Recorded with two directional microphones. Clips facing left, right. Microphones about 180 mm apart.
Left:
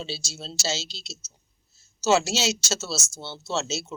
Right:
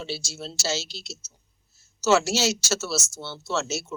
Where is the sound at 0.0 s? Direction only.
20° left (ahead or behind).